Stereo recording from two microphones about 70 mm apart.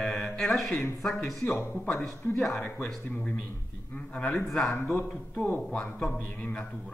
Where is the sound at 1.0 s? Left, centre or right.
Centre.